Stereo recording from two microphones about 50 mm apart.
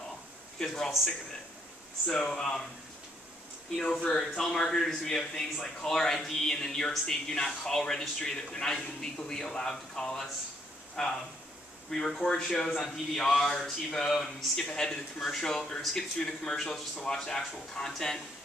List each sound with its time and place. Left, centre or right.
2.0 s a man's voice: centre
3.7 s a man's voice: centre
14.1 s speech: centre
14.6 s a man's voice: centre